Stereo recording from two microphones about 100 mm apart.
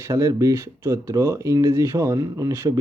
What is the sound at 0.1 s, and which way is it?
Speech, 35° right (ahead or behind).